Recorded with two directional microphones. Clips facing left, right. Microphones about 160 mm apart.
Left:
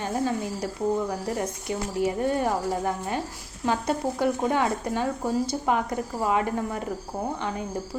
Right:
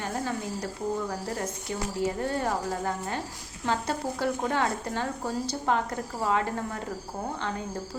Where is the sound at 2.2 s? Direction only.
15° left (ahead or behind).